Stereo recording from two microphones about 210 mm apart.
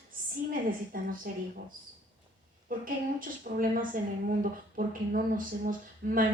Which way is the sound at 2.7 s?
40° right (ahead or behind).